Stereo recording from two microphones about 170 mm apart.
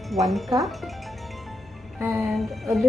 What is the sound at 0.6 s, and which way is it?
Speech, centre (ahead or behind).